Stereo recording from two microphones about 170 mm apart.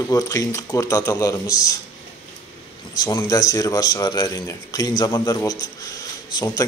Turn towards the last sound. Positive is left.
turn(degrees=25)  # may be behind; listen again after turning